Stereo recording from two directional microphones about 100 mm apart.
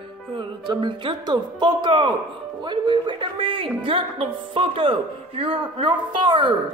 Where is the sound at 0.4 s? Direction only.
55° right (ahead or behind).